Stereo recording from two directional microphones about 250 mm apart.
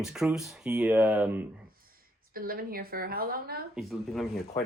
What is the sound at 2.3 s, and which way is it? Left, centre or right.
A woman's voice, right.